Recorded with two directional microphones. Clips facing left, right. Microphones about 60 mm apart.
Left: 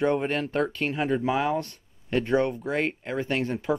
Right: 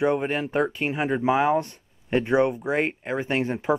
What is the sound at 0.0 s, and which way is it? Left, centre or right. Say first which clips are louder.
Speech: right 1 dB; centre.